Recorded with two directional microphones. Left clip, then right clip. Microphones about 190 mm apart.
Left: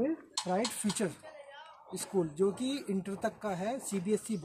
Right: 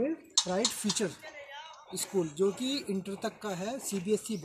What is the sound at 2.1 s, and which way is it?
Speech, 10° left (ahead or behind).